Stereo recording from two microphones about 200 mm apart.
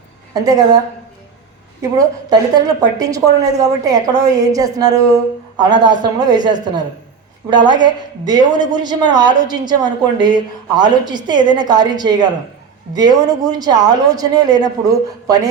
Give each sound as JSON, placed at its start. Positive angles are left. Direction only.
{"t": 0.3, "sound": "a woman's voice", "side_deg": -20}
{"t": 2.0, "sound": "a woman's voice", "side_deg": -20}
{"t": 7.7, "sound": "a woman's voice", "side_deg": -20}